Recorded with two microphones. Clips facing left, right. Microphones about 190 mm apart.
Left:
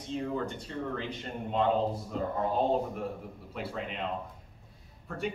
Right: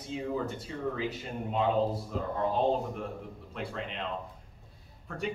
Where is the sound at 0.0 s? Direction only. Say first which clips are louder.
Even; 5° right (ahead or behind).